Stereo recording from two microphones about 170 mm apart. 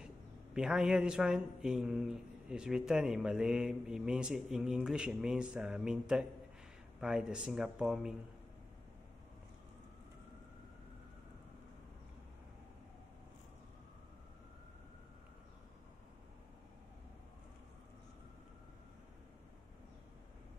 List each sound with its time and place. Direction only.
0.6 s speech: 5° right (ahead or behind)